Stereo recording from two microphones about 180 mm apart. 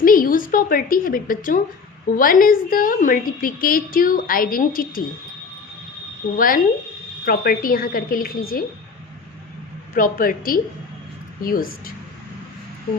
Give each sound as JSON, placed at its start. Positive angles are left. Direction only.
{"t": 0.0, "sound": "a woman's voice", "side_deg": 50}
{"t": 6.3, "sound": "a woman's voice", "side_deg": 50}
{"t": 9.9, "sound": "a woman's voice", "side_deg": 50}